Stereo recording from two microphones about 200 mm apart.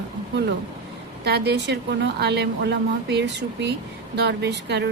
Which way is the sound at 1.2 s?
55° right (ahead or behind).